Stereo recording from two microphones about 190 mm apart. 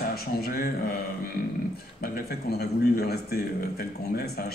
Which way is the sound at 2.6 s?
55° left (ahead or behind).